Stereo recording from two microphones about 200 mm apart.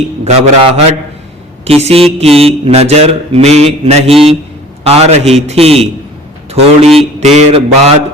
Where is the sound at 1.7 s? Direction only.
30° right (ahead or behind).